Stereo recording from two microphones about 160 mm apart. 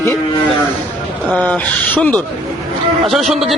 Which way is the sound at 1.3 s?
10° left (ahead or behind).